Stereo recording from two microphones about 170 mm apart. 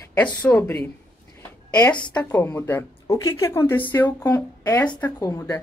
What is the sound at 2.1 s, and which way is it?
Speech, 10° left (ahead or behind).